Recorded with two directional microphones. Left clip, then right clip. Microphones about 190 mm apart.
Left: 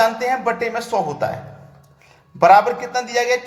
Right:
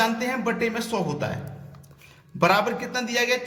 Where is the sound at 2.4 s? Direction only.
25° right (ahead or behind).